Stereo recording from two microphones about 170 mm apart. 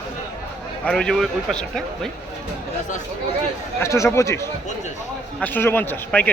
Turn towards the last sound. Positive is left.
turn(degrees=10)  # may be behind; listen again after turning